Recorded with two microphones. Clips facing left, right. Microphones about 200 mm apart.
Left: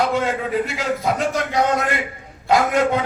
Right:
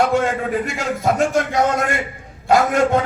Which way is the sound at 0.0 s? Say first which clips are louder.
Right 3 dB; 50° right (ahead or behind).